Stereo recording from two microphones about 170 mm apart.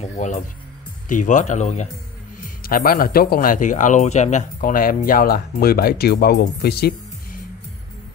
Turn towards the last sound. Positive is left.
turn(degrees=70)  # may be behind; listen again after turning